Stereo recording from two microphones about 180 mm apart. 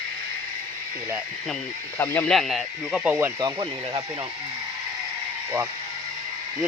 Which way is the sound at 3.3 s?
25° right (ahead or behind).